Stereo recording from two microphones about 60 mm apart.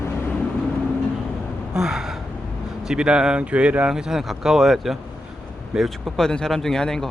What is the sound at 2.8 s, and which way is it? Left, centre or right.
Speech, centre.